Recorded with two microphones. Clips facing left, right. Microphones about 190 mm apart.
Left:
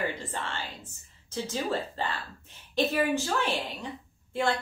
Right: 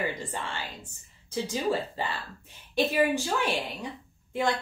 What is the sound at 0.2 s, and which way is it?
A woman's voice, 15° right (ahead or behind).